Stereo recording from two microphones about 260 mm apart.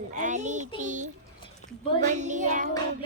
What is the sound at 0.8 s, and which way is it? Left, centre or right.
Speech, right.